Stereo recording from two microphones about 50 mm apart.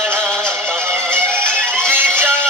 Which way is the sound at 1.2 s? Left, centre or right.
Right.